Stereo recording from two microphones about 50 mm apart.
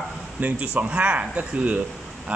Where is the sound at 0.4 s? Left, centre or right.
Right.